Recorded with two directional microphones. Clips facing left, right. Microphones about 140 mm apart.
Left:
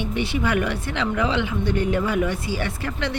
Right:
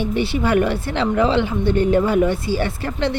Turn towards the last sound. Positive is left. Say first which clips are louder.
# right 5 dB
turn(degrees=-30)  # may be behind; listen again after turning